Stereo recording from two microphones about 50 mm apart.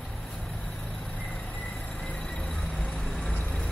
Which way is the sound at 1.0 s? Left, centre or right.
Left.